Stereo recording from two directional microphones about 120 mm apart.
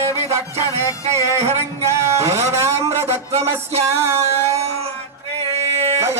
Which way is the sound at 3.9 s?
25° right (ahead or behind).